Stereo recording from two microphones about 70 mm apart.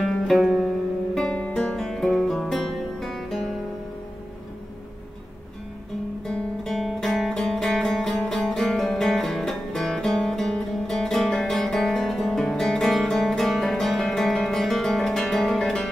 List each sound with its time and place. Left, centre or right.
0.0 s music: centre
1.3 s music: centre
1.8 s music: centre
6.2 s music: centre